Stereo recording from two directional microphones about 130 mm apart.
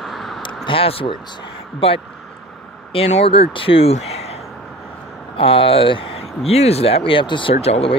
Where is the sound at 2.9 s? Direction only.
55° left (ahead or behind).